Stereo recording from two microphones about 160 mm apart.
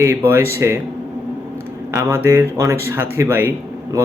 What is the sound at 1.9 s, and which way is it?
A man's voice, 15° right (ahead or behind).